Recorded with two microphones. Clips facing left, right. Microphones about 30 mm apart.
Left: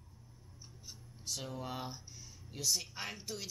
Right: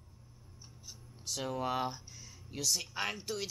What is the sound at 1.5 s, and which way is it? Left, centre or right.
Speech, right.